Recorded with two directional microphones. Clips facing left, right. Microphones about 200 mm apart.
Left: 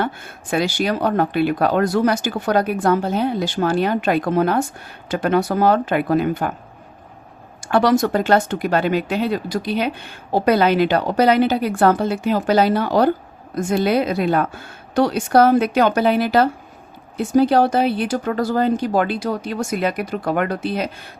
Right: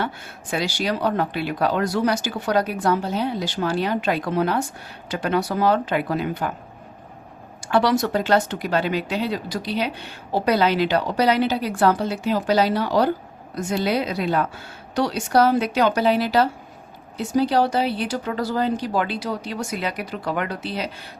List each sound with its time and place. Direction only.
0.0 s speech: 50° left (ahead or behind)
7.6 s speech: 50° left (ahead or behind)